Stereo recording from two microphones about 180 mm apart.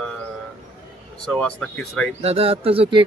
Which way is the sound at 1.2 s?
5° left (ahead or behind).